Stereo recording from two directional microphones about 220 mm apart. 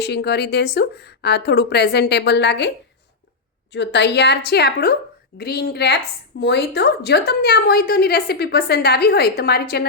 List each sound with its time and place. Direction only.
0.0 s a woman's voice: 50° left (ahead or behind)